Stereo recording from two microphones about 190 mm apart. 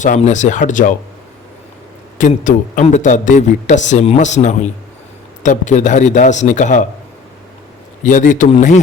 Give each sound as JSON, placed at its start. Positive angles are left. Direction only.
{"t": 0.0, "sound": "a man's voice", "side_deg": 40}
{"t": 2.1, "sound": "a man's voice", "side_deg": 40}
{"t": 8.0, "sound": "a man's voice", "side_deg": 45}